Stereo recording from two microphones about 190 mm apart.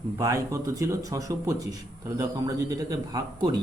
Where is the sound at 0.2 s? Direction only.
20° right (ahead or behind).